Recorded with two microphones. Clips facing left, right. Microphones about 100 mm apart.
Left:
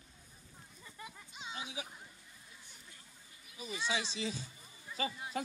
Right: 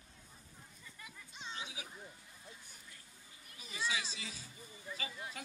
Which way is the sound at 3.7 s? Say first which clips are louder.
Left 2 dB; 25° left (ahead or behind).